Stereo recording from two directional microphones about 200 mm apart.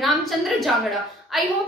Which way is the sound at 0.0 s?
Centre (ahead or behind).